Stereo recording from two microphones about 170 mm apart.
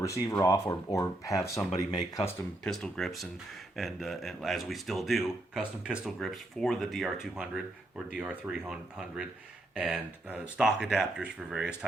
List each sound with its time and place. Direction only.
0.0 s speech: 20° left (ahead or behind)
2.6 s speech: 5° left (ahead or behind)